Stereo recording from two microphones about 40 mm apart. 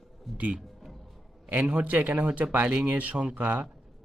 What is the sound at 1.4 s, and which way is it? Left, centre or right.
Speech, right.